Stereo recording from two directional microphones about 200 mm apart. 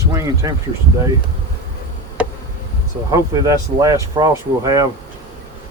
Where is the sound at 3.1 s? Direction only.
15° right (ahead or behind).